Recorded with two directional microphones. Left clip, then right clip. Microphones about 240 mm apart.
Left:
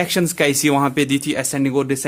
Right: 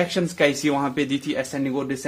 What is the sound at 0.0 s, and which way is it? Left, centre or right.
Speech, left.